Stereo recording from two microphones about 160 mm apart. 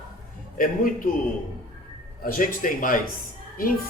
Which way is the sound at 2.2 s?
60° left (ahead or behind).